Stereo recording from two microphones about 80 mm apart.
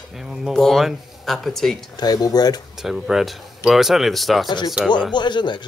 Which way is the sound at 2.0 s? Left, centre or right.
Left.